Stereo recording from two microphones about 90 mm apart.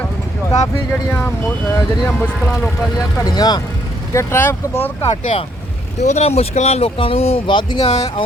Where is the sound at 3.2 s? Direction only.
50° left (ahead or behind).